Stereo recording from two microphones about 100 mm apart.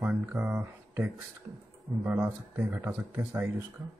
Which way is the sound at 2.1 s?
30° right (ahead or behind).